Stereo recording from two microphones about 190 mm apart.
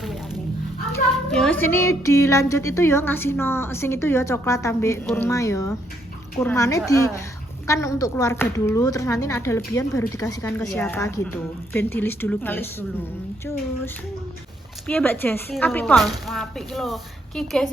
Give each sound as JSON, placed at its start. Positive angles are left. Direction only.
{"t": 1.3, "sound": "speech", "side_deg": 5}
{"t": 6.3, "sound": "speech", "side_deg": 5}
{"t": 6.6, "sound": "speech", "side_deg": 15}
{"t": 14.8, "sound": "speech", "side_deg": 10}